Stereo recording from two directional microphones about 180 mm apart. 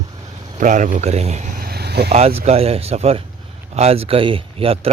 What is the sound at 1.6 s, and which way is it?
Vehicle, 60° right (ahead or behind).